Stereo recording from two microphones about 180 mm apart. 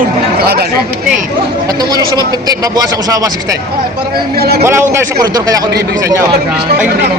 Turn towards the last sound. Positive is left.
turn(degrees=-20)  # may be behind; listen again after turning